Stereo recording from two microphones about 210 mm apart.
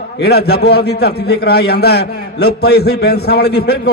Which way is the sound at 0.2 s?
50° left (ahead or behind).